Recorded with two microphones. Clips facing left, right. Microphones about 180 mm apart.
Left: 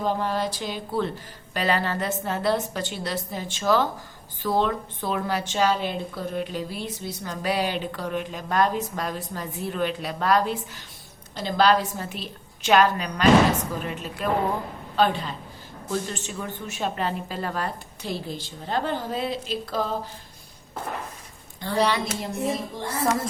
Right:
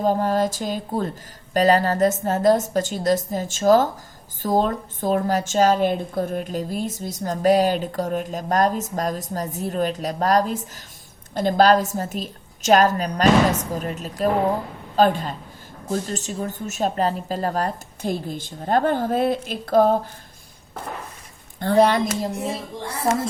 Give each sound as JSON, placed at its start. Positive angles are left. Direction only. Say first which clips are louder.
{"t": 0.0, "sound": "a woman's voice", "louder": "right 5 dB", "side_deg": -45}
{"t": 21.6, "sound": "a woman's voice", "louder": "right 7 dB", "side_deg": -50}